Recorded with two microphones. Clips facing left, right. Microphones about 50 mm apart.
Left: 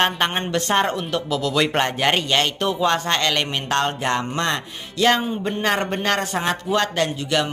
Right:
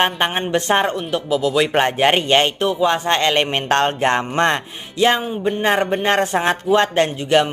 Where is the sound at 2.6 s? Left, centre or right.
Centre.